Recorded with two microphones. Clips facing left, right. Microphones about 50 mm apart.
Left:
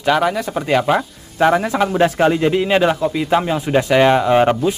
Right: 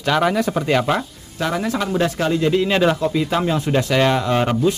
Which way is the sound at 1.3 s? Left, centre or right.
Left.